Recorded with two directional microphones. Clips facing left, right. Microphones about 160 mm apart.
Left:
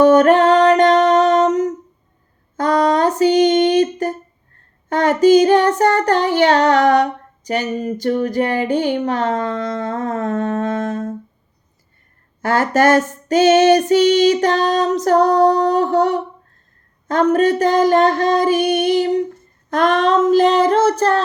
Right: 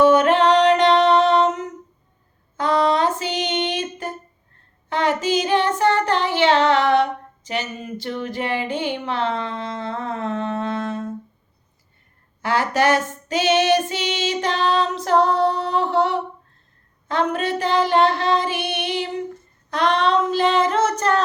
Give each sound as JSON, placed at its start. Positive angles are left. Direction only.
{"t": 0.0, "sound": "music", "side_deg": 45}
{"t": 2.6, "sound": "female singing", "side_deg": 45}
{"t": 12.4, "sound": "female singing", "side_deg": 45}
{"t": 17.1, "sound": "a sound", "side_deg": 45}
{"t": 19.7, "sound": "female singing", "side_deg": 45}